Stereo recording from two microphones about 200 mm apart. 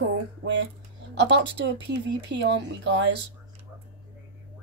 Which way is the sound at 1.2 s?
60° right (ahead or behind).